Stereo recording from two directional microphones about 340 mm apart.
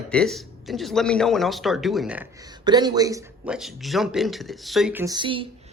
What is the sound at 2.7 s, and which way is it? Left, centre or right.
Speech, centre.